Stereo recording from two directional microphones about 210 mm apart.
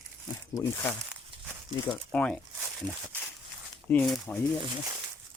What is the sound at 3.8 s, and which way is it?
Speech, 5° left (ahead or behind).